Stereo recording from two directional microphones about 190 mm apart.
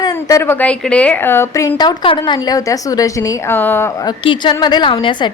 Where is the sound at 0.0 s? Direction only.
20° left (ahead or behind).